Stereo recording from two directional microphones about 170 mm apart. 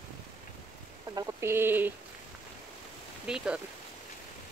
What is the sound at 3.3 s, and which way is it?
Speech, 5° right (ahead or behind).